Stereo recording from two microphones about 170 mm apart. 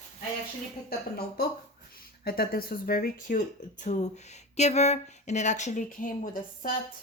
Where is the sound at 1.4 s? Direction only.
70° left (ahead or behind); by 6.7 s 50° left (ahead or behind).